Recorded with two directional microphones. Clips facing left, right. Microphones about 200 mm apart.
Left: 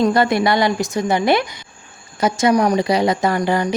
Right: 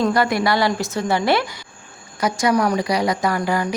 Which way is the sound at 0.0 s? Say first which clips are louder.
Left 3 dB; 25° left (ahead or behind).